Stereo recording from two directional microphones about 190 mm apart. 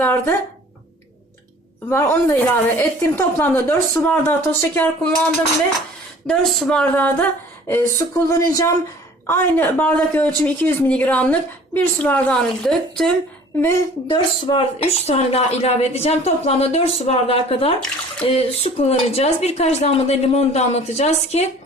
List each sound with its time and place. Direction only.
0.0 s speech: 10° left (ahead or behind)
1.9 s a woman's voice: 15° left (ahead or behind)
14.1 s a woman's voice: 25° left (ahead or behind)